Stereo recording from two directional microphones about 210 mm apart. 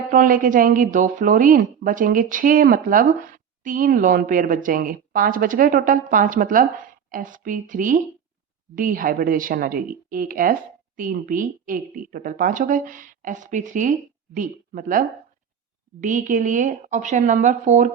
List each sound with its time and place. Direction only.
0.1 s a woman's voice: 40° right (ahead or behind)